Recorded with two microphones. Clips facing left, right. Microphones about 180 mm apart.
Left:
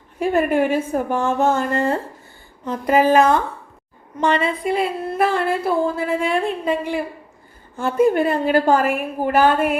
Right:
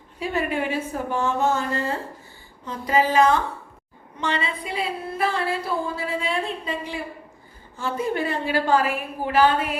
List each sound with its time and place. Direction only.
0.2 s a woman's voice: 50° left (ahead or behind)